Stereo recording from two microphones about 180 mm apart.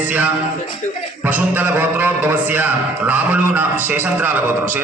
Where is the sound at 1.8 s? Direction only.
10° right (ahead or behind).